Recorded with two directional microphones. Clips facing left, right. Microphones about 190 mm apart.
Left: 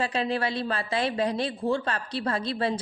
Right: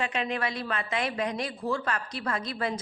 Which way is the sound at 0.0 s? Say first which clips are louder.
Left 3 dB; 35° left (ahead or behind).